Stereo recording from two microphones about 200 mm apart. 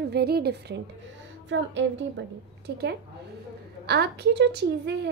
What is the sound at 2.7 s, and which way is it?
Speech, 55° right (ahead or behind).